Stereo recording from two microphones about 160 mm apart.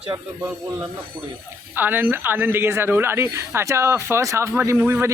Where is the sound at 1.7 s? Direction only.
10° right (ahead or behind).